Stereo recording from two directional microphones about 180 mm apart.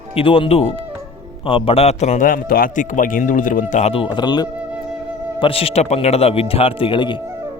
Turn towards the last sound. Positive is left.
turn(degrees=25)  # may be behind; listen again after turning